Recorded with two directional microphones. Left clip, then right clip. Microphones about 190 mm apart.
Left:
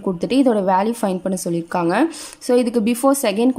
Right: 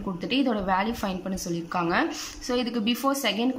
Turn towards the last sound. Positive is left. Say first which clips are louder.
# left 9 dB
turn(degrees=30)  # may be behind; listen again after turning